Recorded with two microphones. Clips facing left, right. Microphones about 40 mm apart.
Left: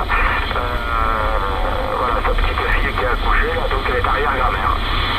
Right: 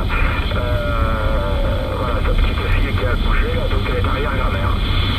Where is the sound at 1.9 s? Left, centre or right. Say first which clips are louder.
Left 4 dB; centre.